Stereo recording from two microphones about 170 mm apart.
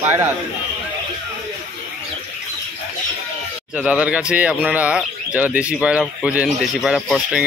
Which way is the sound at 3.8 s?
5° right (ahead or behind).